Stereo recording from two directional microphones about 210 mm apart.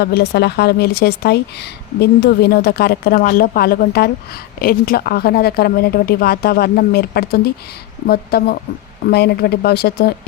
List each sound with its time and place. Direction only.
0.0 s speech: 50° left (ahead or behind)